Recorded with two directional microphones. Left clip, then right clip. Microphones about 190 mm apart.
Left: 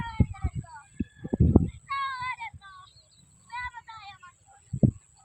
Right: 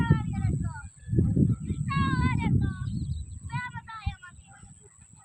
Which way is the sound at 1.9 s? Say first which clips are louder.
Right 1 dB; 5° right (ahead or behind).